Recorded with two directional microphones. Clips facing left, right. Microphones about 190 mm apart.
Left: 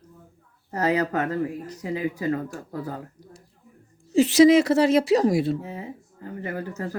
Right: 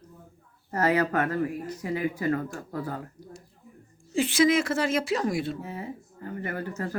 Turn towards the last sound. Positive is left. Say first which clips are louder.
# left 1 dB
turn(degrees=15)  # may be behind; listen again after turning